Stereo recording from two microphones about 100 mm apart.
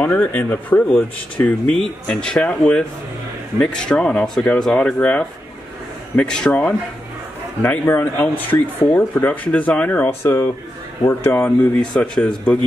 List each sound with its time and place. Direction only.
0.0 s speech: 15° left (ahead or behind)
1.7 s speech: 5° left (ahead or behind)
10.2 s speech: 25° left (ahead or behind); by 12.5 s 10° left (ahead or behind)